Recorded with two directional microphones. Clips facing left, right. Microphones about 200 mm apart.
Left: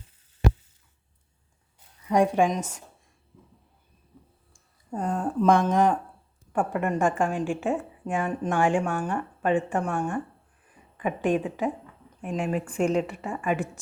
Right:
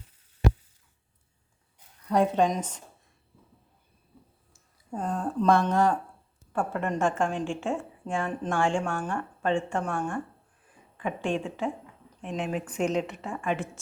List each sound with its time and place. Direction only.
2.0 s a woman's voice: 10° left (ahead or behind)
4.5 s a sound: 5° right (ahead or behind)
5.2 s a woman's voice: 10° left (ahead or behind)
8.1 s a woman's voice: 15° left (ahead or behind)